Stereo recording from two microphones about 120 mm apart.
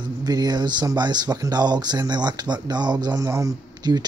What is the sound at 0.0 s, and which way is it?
Speech, 35° right (ahead or behind).